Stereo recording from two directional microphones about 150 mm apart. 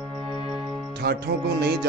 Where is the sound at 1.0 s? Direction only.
90° right.